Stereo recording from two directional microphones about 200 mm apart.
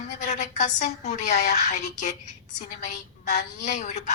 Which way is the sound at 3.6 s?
35° left (ahead or behind).